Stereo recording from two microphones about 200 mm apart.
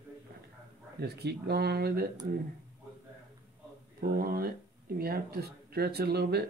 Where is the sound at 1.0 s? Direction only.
55° right (ahead or behind).